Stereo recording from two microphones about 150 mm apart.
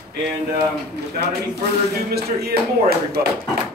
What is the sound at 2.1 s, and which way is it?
A man's voice, 90° right.